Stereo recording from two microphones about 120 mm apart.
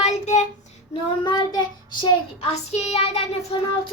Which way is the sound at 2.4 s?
65° left (ahead or behind).